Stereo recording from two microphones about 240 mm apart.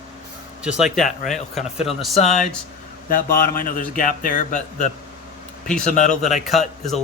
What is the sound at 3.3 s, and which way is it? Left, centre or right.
Speech, left.